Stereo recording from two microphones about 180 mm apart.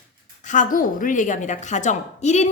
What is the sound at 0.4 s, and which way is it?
A woman's voice, 45° left (ahead or behind).